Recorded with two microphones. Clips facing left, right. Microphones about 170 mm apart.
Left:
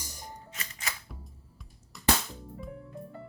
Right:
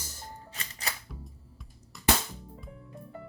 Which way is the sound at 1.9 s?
Centre (ahead or behind).